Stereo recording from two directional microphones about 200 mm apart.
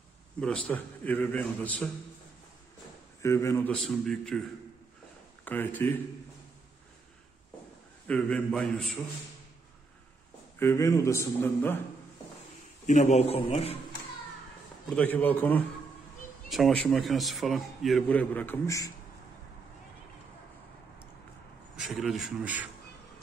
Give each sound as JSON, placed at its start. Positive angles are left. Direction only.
{"t": 0.4, "sound": "a man's voice", "side_deg": 5}
{"t": 3.2, "sound": "a man's voice", "side_deg": 15}
{"t": 5.4, "sound": "speech", "side_deg": 10}
{"t": 8.1, "sound": "a man's voice", "side_deg": 5}
{"t": 10.6, "sound": "a man's voice", "side_deg": 15}
{"t": 12.8, "sound": "a man's voice", "side_deg": 35}
{"t": 14.9, "sound": "a man's voice", "side_deg": 5}
{"t": 21.7, "sound": "a man's voice", "side_deg": 0}